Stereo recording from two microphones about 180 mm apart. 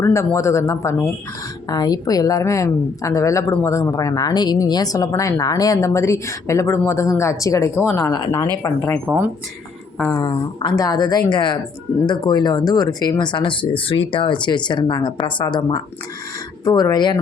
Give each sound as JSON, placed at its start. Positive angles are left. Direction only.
{"t": 0.0, "sound": "a woman's voice", "side_deg": 15}
{"t": 9.0, "sound": "speech", "side_deg": -10}
{"t": 10.1, "sound": "speech", "side_deg": 25}